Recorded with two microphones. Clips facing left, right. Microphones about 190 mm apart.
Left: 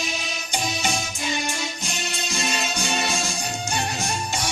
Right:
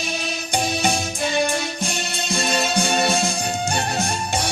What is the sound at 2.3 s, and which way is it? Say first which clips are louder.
Music: right 7 dB; 55° right (ahead or behind).